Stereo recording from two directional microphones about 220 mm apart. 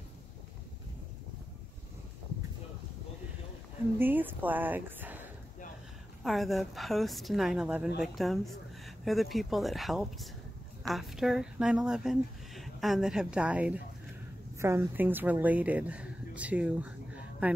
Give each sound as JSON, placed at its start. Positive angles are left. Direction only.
{"t": 4.0, "sound": "a woman's voice", "side_deg": -10}